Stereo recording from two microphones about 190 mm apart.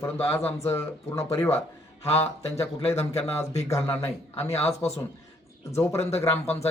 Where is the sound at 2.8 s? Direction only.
35° left (ahead or behind).